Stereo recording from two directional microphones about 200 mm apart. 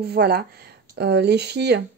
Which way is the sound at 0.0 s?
50° right (ahead or behind).